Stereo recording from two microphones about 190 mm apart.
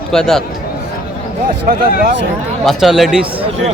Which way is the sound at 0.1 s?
Centre (ahead or behind).